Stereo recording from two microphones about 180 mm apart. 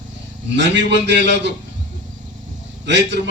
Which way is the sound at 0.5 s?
80° right.